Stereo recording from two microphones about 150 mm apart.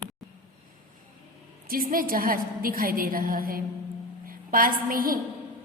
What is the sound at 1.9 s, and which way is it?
A man's voice, 70° right (ahead or behind).